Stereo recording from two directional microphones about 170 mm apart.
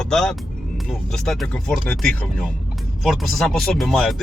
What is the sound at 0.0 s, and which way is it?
Speech, 5° left (ahead or behind).